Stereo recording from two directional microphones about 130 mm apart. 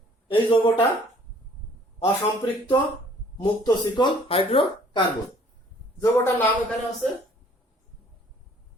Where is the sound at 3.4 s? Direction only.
35° left (ahead or behind).